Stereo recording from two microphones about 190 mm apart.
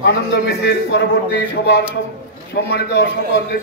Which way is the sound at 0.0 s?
60° left (ahead or behind).